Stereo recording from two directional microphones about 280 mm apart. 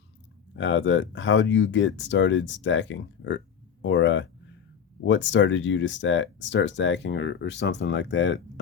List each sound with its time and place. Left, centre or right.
0.5 s speech: left